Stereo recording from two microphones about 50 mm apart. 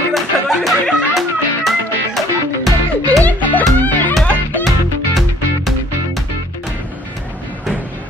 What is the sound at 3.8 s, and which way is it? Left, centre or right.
Music, left.